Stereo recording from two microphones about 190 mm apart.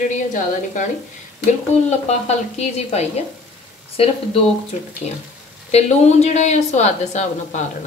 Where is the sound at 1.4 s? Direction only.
35° left (ahead or behind).